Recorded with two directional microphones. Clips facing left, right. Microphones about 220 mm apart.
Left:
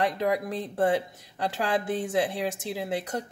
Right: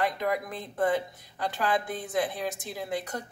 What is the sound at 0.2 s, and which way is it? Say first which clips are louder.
Speech: left 3 dB; 30° left (ahead or behind).